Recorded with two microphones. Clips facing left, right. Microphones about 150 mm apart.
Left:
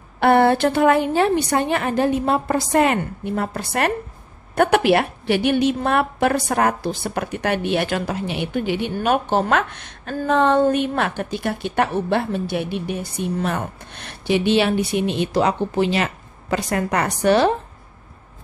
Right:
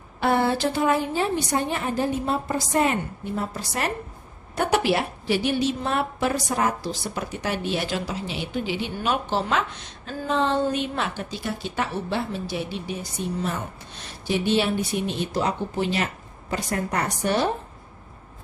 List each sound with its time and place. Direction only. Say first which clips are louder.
0.2 s a woman's voice: left 7 dB; 60° left (ahead or behind); by 17.6 s 90° left